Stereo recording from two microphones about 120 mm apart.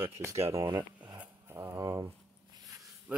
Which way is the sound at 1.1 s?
20° right (ahead or behind).